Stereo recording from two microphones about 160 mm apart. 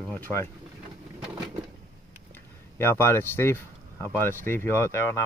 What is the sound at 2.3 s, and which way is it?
Speech, 15° left (ahead or behind).